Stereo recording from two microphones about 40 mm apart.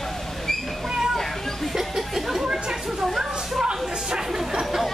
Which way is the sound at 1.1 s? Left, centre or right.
Centre.